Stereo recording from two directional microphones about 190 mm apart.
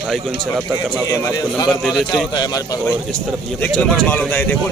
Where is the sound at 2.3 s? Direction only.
20° left (ahead or behind).